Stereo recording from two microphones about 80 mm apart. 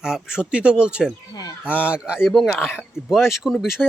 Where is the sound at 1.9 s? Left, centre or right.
Centre.